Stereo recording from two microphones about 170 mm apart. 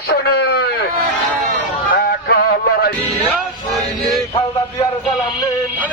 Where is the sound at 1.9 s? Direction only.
65° left (ahead or behind).